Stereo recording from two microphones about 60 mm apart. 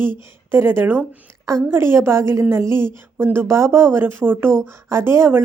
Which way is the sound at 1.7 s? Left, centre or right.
Right.